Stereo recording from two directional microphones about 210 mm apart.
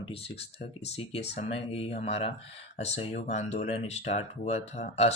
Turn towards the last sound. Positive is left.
turn(degrees=30)  # may be behind; listen again after turning